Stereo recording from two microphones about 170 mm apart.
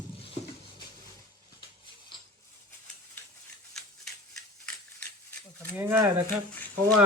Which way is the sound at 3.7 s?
5° left (ahead or behind).